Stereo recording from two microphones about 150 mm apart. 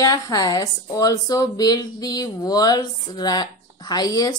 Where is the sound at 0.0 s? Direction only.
25° left (ahead or behind).